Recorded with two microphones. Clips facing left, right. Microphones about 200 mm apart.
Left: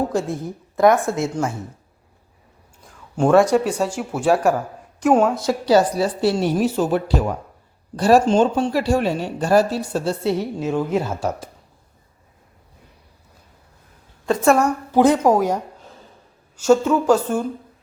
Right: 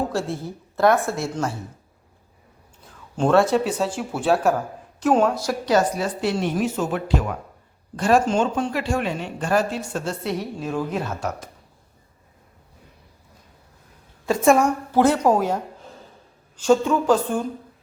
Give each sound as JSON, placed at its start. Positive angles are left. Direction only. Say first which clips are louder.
{"t": 0.1, "sound": "a woman's voice", "louder": "left 3 dB", "side_deg": 15}
{"t": 3.2, "sound": "a woman's voice", "louder": "left 3 dB", "side_deg": 10}
{"t": 5.4, "sound": "speech", "louder": "left 4 dB", "side_deg": 25}
{"t": 14.3, "sound": "a woman's voice", "louder": "left 1 dB", "side_deg": 0}
{"t": 14.9, "sound": "a woman's voice", "louder": "left 3 dB", "side_deg": 15}